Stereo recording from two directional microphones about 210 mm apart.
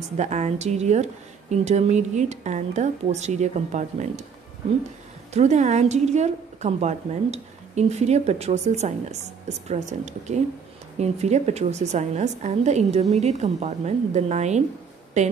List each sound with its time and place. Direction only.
0.2 s a woman's voice: 35° right (ahead or behind)
5.3 s a woman's voice: 30° right (ahead or behind)